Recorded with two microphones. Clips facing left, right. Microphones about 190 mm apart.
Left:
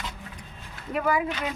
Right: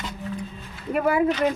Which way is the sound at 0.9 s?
50° right (ahead or behind).